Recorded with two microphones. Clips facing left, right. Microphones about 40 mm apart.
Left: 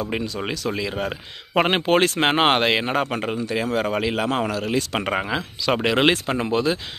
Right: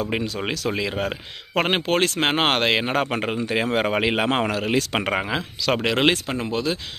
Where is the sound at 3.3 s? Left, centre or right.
Right.